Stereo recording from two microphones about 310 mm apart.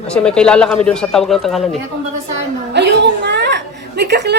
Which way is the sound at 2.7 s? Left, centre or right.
Right.